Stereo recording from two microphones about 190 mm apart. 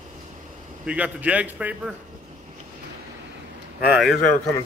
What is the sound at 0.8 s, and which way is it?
A man's voice, 5° right (ahead or behind).